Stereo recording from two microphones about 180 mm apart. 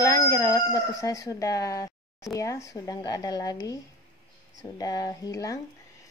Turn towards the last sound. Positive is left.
turn(degrees=20)  # may be behind; listen again after turning